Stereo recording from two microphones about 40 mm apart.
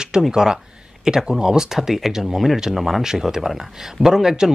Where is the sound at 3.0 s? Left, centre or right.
Centre.